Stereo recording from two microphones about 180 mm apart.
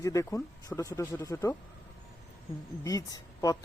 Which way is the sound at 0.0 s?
15° left (ahead or behind).